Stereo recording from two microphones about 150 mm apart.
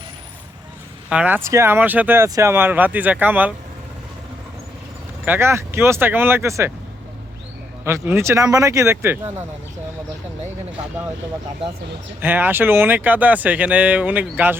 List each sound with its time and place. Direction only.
1.1 s speech: 10° right (ahead or behind)
5.2 s speech: 15° right (ahead or behind)
7.9 s speech: 15° right (ahead or behind)
12.2 s speech: 15° right (ahead or behind)